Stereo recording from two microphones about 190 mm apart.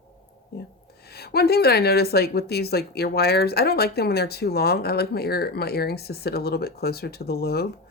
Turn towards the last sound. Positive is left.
turn(degrees=55)  # may be behind; listen again after turning